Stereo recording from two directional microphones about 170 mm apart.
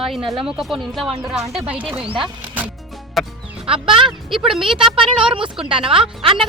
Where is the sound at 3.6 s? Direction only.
35° right (ahead or behind).